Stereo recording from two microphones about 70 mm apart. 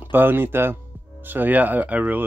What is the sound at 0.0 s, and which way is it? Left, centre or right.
Speech, right.